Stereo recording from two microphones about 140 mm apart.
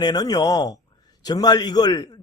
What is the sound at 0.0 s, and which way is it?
Speech, 30° left (ahead or behind).